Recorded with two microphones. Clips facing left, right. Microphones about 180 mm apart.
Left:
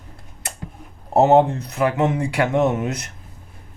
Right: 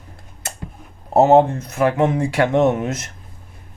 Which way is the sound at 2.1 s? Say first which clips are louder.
Right 3 dB; 25° right (ahead or behind).